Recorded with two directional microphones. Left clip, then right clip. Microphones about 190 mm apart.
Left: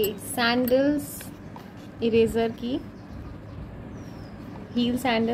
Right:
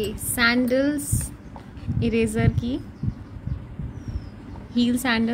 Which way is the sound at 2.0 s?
35° right (ahead or behind).